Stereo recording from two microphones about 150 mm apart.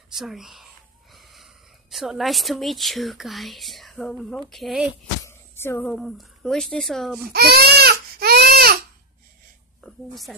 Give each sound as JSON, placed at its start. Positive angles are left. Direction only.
{"t": 0.1, "sound": "speech", "side_deg": 0}
{"t": 5.2, "sound": "music", "side_deg": 15}
{"t": 5.9, "sound": "speech", "side_deg": 0}
{"t": 7.3, "sound": "baby cry", "side_deg": -90}
{"t": 9.8, "sound": "a woman's voice", "side_deg": 0}